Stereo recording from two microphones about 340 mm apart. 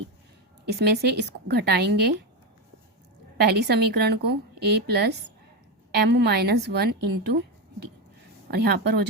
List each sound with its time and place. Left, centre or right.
0.7 s a woman's voice: right
3.3 s a woman's voice: right
8.4 s a woman's voice: right